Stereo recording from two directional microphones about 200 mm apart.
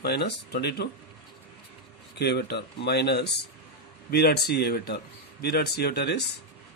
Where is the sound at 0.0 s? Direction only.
55° left (ahead or behind).